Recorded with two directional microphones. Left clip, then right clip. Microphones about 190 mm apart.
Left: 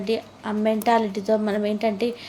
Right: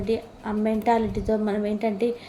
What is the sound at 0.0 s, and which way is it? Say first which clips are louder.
A woman's voice: left 1 dB; 20° left (ahead or behind).